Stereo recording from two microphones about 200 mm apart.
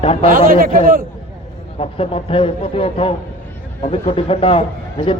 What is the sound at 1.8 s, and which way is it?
A man's voice, 30° left (ahead or behind).